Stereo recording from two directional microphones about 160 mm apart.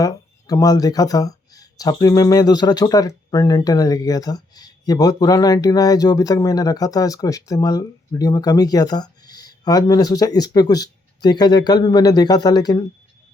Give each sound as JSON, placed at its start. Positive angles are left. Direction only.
{"t": 0.0, "sound": "speech", "side_deg": 20}